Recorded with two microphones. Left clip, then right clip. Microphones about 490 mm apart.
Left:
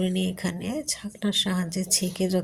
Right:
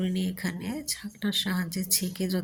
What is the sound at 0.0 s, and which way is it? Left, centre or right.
Speech, right.